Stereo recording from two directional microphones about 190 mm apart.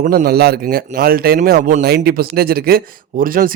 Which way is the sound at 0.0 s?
50° right (ahead or behind).